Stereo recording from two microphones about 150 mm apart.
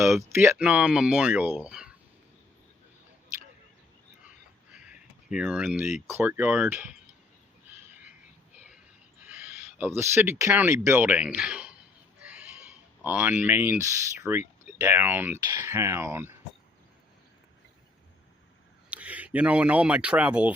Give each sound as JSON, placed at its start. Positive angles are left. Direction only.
{"t": 0.2, "sound": "speech", "side_deg": -15}
{"t": 4.7, "sound": "a sound", "side_deg": -5}
{"t": 6.1, "sound": "speech", "side_deg": -15}
{"t": 9.2, "sound": "speech", "side_deg": -10}
{"t": 12.2, "sound": "a sound", "side_deg": -5}
{"t": 14.2, "sound": "speech", "side_deg": -15}
{"t": 18.9, "sound": "speech", "side_deg": -10}